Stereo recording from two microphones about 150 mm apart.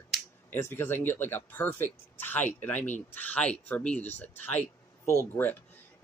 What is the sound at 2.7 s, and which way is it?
Speech, 55° left (ahead or behind).